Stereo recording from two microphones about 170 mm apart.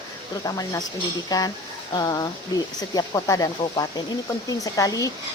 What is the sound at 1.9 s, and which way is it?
A woman's voice, 25° left (ahead or behind).